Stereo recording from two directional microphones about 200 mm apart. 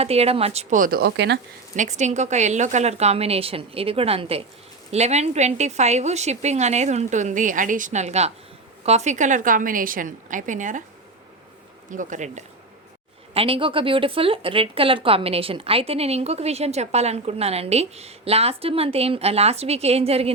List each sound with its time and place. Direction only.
0.0 s a woman's voice: 30° right (ahead or behind); by 1.4 s 55° right (ahead or behind)
1.7 s a woman's voice: 35° right (ahead or behind)
11.9 s a woman's voice: 40° right (ahead or behind)